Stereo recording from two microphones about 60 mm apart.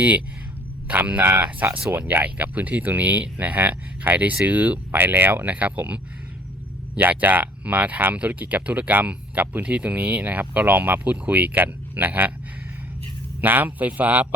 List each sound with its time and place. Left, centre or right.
0.9 s speech: right
7.0 s speech: right
13.4 s speech: right